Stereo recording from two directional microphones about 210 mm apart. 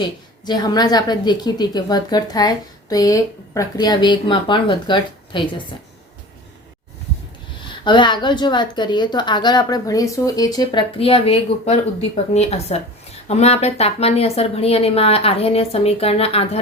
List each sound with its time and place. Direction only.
0.4 s a woman's voice: 20° left (ahead or behind)
7.7 s a woman's voice: 20° left (ahead or behind)